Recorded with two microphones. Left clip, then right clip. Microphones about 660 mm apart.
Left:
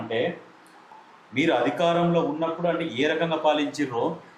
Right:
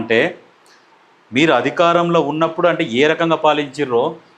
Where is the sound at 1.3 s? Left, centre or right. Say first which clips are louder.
Right 9 dB; right.